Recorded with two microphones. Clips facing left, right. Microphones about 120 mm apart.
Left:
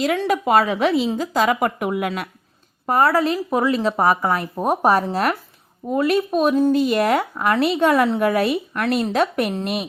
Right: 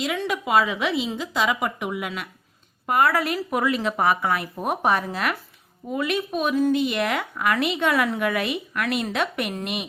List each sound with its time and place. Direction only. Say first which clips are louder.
0.2 s a woman's voice: left 4 dB; 45° left (ahead or behind)
2.8 s speech: left 4 dB; 35° left (ahead or behind)